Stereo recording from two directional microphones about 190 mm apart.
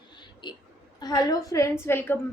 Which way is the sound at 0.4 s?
25° left (ahead or behind).